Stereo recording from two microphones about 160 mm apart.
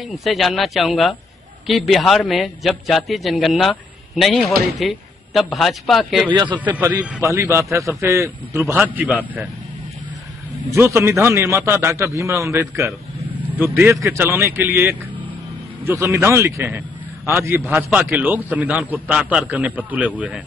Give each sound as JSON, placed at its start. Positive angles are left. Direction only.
{"t": 0.0, "sound": "a man's voice", "side_deg": 0}
{"t": 6.8, "sound": "a man's voice", "side_deg": -10}
{"t": 10.7, "sound": "a man's voice", "side_deg": -15}
{"t": 17.7, "sound": "a man's voice", "side_deg": -5}